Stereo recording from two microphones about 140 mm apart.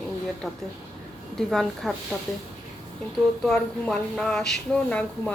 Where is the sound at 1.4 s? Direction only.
Centre (ahead or behind).